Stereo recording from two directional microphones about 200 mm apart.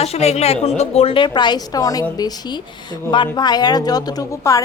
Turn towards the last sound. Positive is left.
turn(degrees=15)  # may be behind; listen again after turning